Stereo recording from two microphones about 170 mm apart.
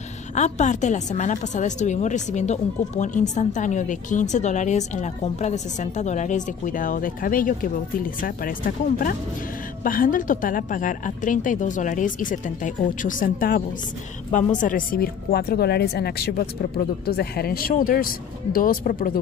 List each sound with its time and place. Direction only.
0.3 s a woman's voice: 45° left (ahead or behind)